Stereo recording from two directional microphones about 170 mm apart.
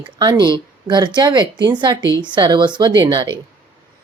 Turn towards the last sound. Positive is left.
turn(degrees=-25)  # may be behind; listen again after turning